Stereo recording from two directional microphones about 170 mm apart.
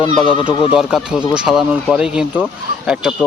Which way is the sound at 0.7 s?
5° right (ahead or behind).